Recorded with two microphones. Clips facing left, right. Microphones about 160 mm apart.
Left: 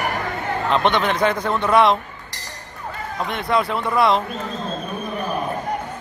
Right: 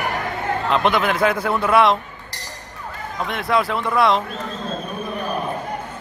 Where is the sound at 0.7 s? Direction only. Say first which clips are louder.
Even; centre (ahead or behind).